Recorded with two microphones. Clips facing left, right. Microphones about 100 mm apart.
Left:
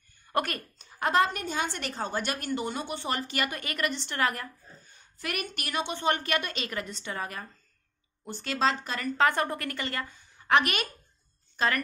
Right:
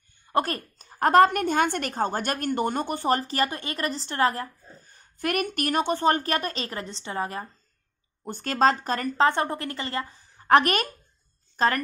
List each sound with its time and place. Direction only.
0.3 s a woman's voice: 30° right (ahead or behind)
8.2 s speech: 45° right (ahead or behind)
9.2 s a woman's voice: 25° right (ahead or behind)